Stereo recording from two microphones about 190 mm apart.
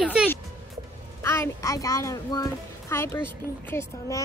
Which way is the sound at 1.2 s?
15° left (ahead or behind).